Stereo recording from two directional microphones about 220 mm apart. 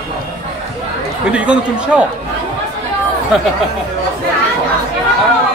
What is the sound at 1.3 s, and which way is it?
Speech, 5° right (ahead or behind).